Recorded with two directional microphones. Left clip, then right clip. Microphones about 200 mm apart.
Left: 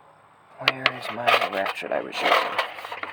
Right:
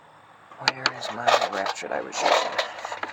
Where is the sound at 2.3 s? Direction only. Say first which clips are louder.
Left 2 dB; 5° left (ahead or behind).